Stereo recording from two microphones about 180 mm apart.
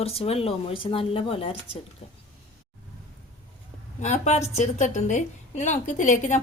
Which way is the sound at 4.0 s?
40° left (ahead or behind).